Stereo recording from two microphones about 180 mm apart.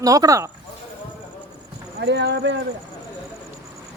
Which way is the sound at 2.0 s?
70° right (ahead or behind).